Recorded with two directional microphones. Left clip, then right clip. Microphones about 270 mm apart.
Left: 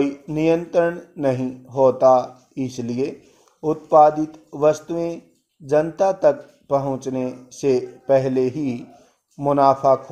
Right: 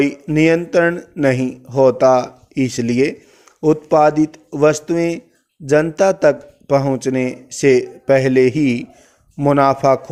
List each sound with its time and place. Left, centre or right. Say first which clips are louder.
0.0 s a man's voice: right 6 dB; right